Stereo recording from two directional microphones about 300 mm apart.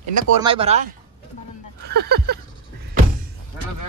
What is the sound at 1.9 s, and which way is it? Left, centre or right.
Speech, right.